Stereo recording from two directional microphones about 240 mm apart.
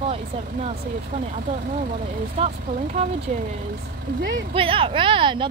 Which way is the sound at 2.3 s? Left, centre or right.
Right.